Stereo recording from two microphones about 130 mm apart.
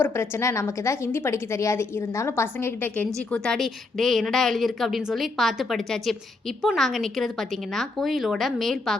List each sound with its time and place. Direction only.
0.0 s a woman's voice: 20° left (ahead or behind); by 9.0 s centre (ahead or behind)